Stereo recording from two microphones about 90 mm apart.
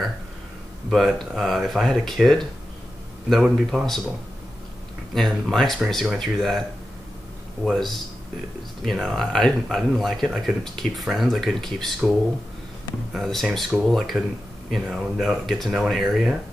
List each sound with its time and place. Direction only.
0.8 s speech: centre (ahead or behind)
5.1 s speech: centre (ahead or behind)
7.6 s speech: centre (ahead or behind)
13.1 s speech: centre (ahead or behind)